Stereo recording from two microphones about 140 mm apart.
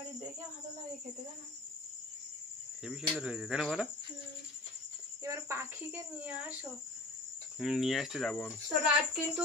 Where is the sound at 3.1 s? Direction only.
5° right (ahead or behind).